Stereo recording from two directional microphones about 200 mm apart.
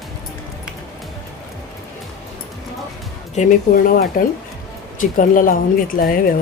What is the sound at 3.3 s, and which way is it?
Speech, 40° left (ahead or behind).